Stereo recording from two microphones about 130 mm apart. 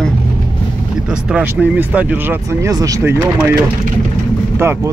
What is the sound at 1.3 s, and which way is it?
Speech, 15° right (ahead or behind).